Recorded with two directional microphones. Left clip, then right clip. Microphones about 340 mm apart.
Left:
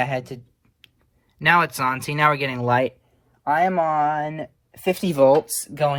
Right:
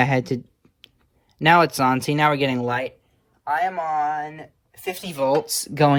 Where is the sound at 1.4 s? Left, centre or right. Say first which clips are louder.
Right 2 dB; centre.